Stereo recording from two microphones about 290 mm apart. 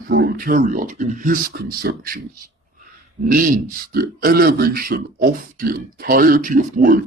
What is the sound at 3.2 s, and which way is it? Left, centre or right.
A man's voice, right.